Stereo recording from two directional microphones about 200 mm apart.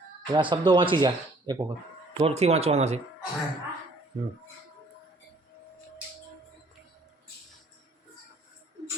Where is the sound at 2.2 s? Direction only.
30° right (ahead or behind).